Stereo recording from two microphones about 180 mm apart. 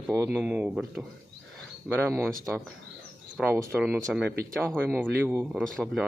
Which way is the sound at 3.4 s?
Centre (ahead or behind).